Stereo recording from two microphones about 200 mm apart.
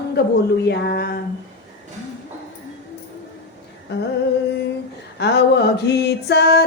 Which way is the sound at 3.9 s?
55° left (ahead or behind).